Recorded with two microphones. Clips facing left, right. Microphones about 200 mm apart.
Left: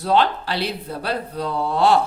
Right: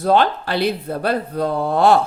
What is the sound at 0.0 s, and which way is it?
Speech, 50° right (ahead or behind).